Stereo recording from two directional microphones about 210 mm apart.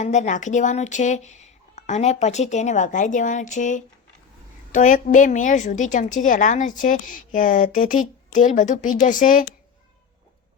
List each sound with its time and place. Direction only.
0.0 s a woman's voice: 35° left (ahead or behind)